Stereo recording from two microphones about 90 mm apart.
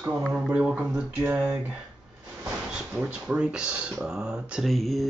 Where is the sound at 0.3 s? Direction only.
10° right (ahead or behind).